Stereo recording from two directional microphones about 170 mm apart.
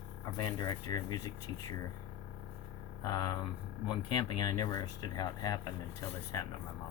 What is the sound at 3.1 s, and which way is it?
Speech, 20° left (ahead or behind).